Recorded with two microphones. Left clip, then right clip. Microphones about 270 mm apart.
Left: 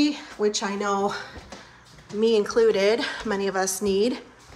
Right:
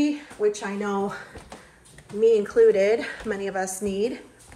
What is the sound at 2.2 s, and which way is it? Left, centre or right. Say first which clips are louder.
Speech: right 2 dB; centre.